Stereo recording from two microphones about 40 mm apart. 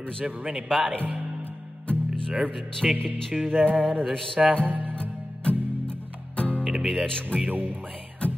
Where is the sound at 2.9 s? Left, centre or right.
Right.